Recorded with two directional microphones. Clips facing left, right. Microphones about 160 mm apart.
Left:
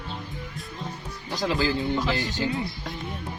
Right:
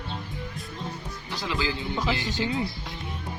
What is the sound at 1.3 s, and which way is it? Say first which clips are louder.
Speech: left 5 dB; 45° left (ahead or behind).